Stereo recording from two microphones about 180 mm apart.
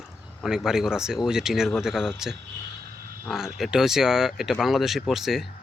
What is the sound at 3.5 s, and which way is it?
Speech, centre (ahead or behind).